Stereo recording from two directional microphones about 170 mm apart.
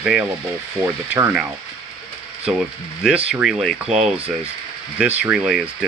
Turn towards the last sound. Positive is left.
turn(degrees=-5)  # may be behind; listen again after turning